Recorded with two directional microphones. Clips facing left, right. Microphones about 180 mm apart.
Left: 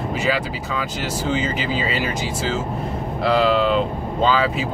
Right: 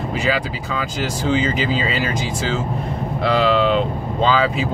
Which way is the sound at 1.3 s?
5° left (ahead or behind).